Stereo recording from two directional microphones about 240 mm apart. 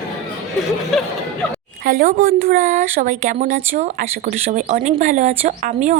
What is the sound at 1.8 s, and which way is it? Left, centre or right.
A woman's voice, right.